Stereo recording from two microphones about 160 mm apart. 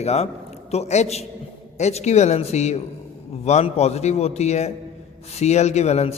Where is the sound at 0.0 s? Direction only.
40° left (ahead or behind).